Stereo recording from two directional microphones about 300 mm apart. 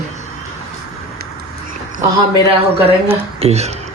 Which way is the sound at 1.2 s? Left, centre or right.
Right.